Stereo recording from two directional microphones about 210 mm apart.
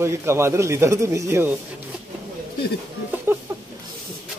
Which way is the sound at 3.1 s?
10° right (ahead or behind).